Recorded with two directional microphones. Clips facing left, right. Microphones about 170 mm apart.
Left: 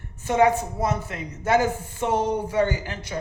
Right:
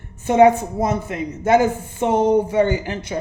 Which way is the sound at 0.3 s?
20° right (ahead or behind).